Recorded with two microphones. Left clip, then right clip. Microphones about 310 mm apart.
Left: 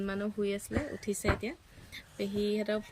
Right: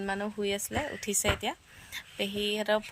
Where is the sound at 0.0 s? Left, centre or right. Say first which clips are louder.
Right 2 dB; centre.